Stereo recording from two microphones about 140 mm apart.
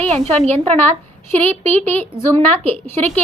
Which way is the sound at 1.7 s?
15° left (ahead or behind).